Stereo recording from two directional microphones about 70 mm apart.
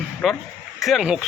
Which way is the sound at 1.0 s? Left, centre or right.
Centre.